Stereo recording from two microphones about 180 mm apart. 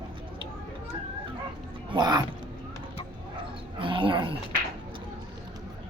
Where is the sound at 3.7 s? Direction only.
30° right (ahead or behind).